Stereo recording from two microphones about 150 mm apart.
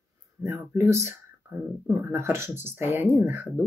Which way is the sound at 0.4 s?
20° right (ahead or behind).